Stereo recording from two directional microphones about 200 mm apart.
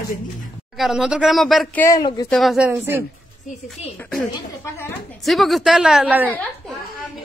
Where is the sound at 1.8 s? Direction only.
20° left (ahead or behind).